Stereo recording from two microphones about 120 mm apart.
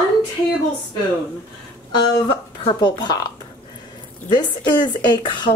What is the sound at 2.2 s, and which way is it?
Speech, 40° left (ahead or behind).